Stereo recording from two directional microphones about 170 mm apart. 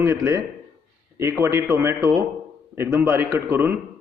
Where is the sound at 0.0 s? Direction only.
15° right (ahead or behind).